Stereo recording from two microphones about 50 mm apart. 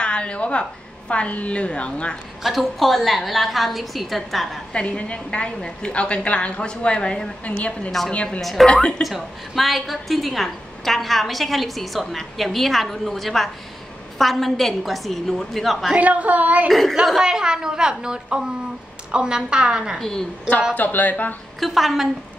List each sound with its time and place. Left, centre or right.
0.0 s a woman's voice: left
2.4 s a woman's voice: centre
4.7 s a woman's voice: left
8.4 s a woman's voice: centre
15.9 s a woman's voice: right
16.6 s a woman's voice: centre
17.2 s a woman's voice: centre
20.0 s a woman's voice: centre
20.7 s speech: left
21.5 s a woman's voice: centre